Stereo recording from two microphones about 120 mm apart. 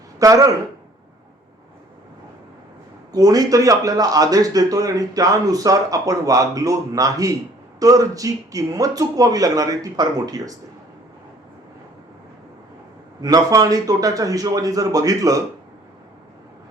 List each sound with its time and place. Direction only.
0.2 s speech: 30° right (ahead or behind)
3.1 s a man's voice: 30° right (ahead or behind)
13.2 s a man's voice: 30° right (ahead or behind)